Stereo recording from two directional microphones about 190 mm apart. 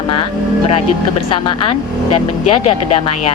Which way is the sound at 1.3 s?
30° left (ahead or behind).